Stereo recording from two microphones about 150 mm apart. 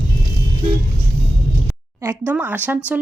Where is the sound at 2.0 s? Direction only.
15° right (ahead or behind).